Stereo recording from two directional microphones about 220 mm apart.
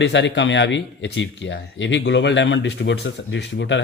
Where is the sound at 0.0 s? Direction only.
55° left (ahead or behind).